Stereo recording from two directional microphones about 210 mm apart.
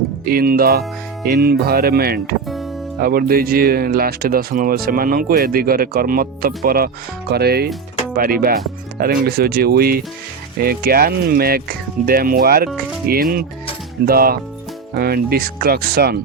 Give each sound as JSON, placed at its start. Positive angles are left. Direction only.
{"t": 0.3, "sound": "speech", "side_deg": -45}